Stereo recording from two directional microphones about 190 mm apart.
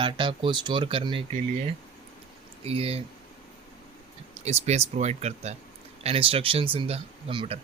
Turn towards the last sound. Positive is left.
turn(degrees=-30)  # may be behind; listen again after turning